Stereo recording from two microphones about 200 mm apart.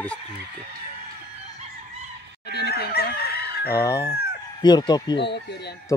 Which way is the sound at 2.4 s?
55° left (ahead or behind).